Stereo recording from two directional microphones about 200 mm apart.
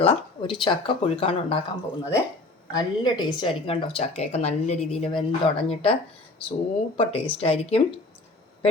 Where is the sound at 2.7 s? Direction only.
20° left (ahead or behind).